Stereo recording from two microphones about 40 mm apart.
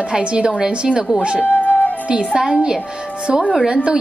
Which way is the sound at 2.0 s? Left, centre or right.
Right.